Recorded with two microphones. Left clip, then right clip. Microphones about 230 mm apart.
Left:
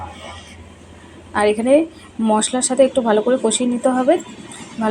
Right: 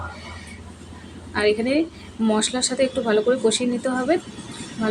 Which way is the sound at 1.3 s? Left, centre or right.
Centre.